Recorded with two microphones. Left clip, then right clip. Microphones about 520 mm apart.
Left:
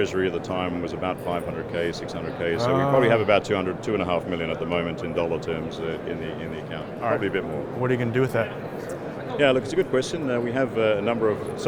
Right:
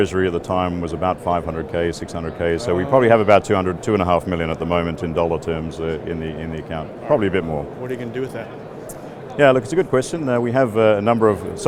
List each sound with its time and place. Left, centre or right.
0.0 s speech: right
7.9 s a man's voice: left
9.4 s speech: right